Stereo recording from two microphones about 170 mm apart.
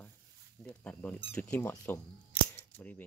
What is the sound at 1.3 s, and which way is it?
Speech, 10° left (ahead or behind).